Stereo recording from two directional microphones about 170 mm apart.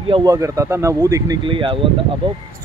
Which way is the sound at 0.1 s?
20° right (ahead or behind).